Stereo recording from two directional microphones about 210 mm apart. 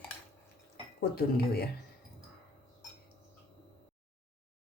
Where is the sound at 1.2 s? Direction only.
50° left (ahead or behind).